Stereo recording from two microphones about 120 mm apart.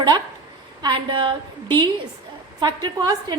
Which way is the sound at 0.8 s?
40° right (ahead or behind).